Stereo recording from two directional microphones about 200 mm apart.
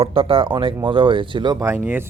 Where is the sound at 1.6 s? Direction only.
10° right (ahead or behind).